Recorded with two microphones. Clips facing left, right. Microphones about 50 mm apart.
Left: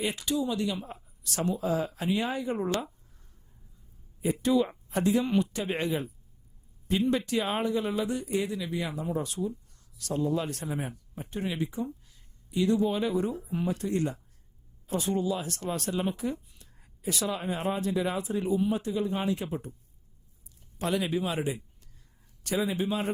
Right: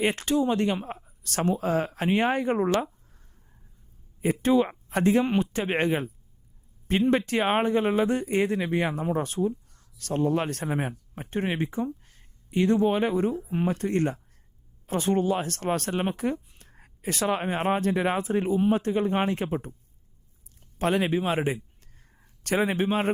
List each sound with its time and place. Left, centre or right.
0.0 s speech: right
4.2 s speech: right
20.7 s speech: right
22.4 s speech: right